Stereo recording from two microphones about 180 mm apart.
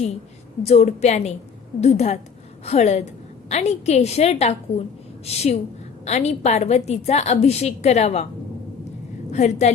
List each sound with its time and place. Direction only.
0.6 s a woman's voice: 35° left (ahead or behind)
9.3 s a woman's voice: 40° left (ahead or behind)